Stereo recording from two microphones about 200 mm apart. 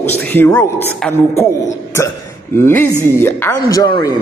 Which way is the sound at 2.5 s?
10° left (ahead or behind).